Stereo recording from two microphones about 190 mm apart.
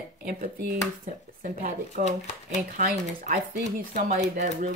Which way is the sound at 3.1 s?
45° right (ahead or behind).